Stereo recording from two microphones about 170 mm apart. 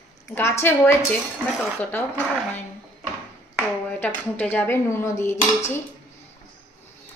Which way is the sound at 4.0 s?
10° left (ahead or behind).